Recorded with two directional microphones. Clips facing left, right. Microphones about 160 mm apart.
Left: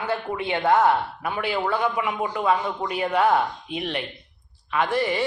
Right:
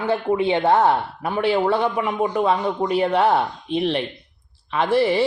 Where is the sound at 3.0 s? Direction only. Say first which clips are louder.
Even; 30° right (ahead or behind).